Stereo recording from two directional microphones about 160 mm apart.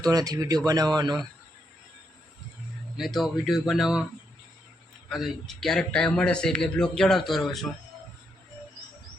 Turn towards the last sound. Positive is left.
turn(degrees=0)  # may be behind; listen again after turning